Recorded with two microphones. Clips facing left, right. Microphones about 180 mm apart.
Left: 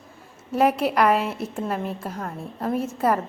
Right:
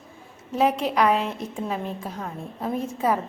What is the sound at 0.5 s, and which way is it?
A woman's voice, 10° left (ahead or behind).